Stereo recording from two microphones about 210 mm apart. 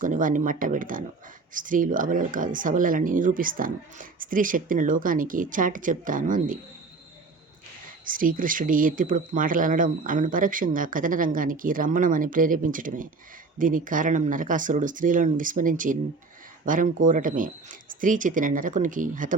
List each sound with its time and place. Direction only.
0.0 s speech: 40° right (ahead or behind)
8.0 s speech: 40° right (ahead or behind)